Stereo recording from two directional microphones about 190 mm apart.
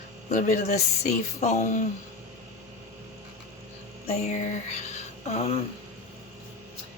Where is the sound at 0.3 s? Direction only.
40° left (ahead or behind).